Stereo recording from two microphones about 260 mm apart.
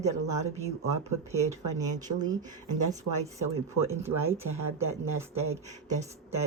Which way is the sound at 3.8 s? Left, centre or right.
Centre.